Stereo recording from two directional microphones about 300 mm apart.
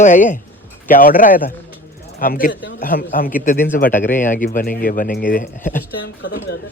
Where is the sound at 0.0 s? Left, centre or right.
Left.